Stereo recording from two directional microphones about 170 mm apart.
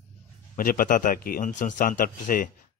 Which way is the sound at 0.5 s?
55° left (ahead or behind).